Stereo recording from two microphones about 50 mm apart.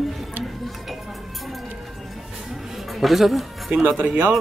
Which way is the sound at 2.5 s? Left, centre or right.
Centre.